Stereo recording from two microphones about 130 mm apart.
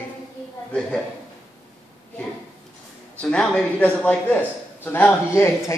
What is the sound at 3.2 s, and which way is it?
A man's voice, 5° left (ahead or behind).